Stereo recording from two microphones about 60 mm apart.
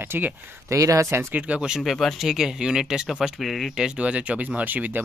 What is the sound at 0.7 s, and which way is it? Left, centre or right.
Speech, right.